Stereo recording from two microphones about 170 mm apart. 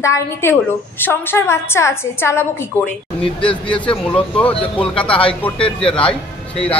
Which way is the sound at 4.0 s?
5° left (ahead or behind).